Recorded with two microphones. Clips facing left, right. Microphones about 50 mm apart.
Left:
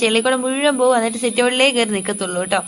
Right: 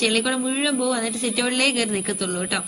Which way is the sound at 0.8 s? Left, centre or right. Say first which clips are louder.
Left 8 dB; left.